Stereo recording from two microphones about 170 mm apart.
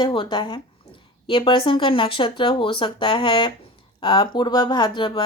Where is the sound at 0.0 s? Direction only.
30° left (ahead or behind).